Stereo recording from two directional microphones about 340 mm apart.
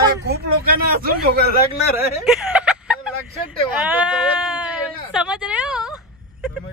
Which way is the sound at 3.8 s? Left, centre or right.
Centre.